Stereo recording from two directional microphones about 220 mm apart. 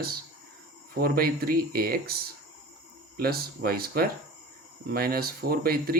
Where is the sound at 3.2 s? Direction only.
45° right (ahead or behind).